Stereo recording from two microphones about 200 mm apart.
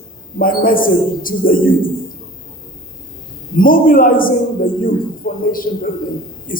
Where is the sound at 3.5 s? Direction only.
45° left (ahead or behind).